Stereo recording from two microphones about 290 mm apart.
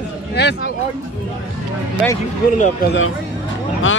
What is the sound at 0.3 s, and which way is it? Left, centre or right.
Speech, left.